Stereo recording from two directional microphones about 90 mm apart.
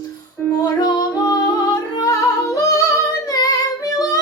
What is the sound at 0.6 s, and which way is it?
Music, 50° left (ahead or behind).